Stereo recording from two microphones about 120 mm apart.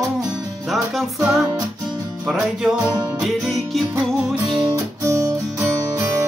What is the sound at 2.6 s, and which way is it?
Music, 5° right (ahead or behind).